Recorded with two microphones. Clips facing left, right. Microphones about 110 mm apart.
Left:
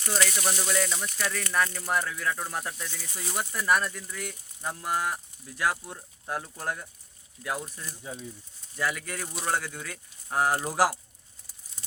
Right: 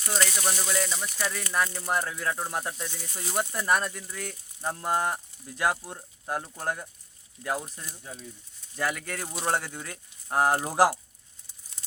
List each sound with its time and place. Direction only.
0.4 s speech: 5° right (ahead or behind); by 6.8 s 25° right (ahead or behind)
8.1 s speech: 5° left (ahead or behind)
8.8 s speech: 40° right (ahead or behind)
10.6 s speech: 20° right (ahead or behind)